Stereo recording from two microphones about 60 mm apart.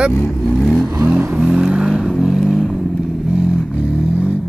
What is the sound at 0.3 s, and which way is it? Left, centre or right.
Vehicle, centre.